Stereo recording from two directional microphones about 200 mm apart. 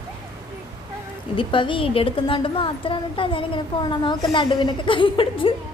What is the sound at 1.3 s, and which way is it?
A woman's voice, 25° left (ahead or behind).